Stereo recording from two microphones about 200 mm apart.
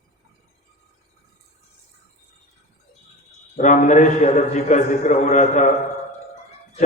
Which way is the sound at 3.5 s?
40° left (ahead or behind).